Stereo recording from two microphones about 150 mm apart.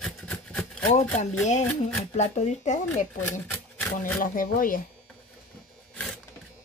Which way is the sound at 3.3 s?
10° left (ahead or behind).